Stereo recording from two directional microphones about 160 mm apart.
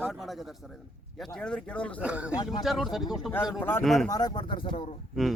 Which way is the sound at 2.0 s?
5° right (ahead or behind).